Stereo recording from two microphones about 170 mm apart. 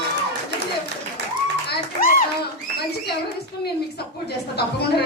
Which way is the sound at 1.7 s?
60° left (ahead or behind).